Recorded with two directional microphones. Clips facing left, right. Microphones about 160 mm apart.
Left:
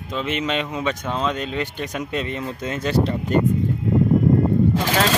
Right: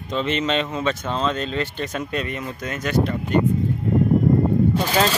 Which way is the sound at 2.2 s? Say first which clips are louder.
Left 2 dB; 25° left (ahead or behind).